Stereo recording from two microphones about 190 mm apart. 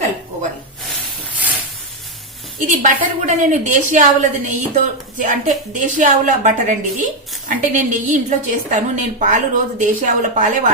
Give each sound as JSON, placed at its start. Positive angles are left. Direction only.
{"t": 2.6, "sound": "a woman's voice", "side_deg": -40}